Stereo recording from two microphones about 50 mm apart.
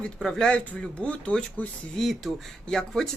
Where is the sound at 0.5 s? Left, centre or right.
Left.